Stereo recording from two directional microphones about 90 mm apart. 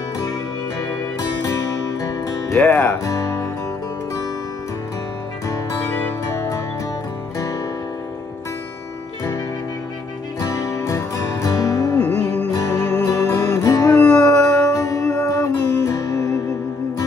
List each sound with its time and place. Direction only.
1.4 s music: 40° left (ahead or behind)
2.5 s speech: 25° left (ahead or behind)
3.0 s music: 35° left (ahead or behind)
6.2 s music: 35° left (ahead or behind)
10.5 s music: 40° left (ahead or behind)
12.0 s music: 15° left (ahead or behind)
12.4 s music: 40° left (ahead or behind)
13.9 s music: 15° left (ahead or behind)
14.2 s music: 40° left (ahead or behind)